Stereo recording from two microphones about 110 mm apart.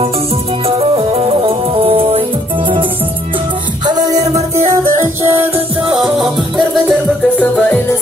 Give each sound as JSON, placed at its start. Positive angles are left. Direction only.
{"t": 0.7, "sound": "music", "side_deg": -60}
{"t": 5.0, "sound": "music", "side_deg": -25}
{"t": 5.9, "sound": "music", "side_deg": -45}
{"t": 6.1, "sound": "music", "side_deg": -5}
{"t": 7.3, "sound": "music", "side_deg": 15}